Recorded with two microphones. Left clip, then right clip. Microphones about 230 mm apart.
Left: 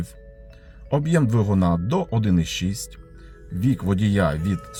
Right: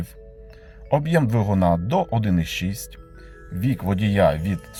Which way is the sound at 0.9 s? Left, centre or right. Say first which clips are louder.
Right 2 dB; centre.